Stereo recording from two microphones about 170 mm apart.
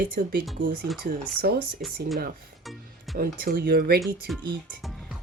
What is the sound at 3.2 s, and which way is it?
Speech, 60° right (ahead or behind).